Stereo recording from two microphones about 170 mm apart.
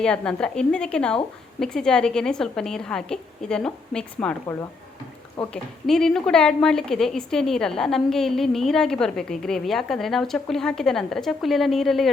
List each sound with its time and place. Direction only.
0.0 s a woman's voice: 5° left (ahead or behind)
5.4 s a woman's voice: 10° left (ahead or behind)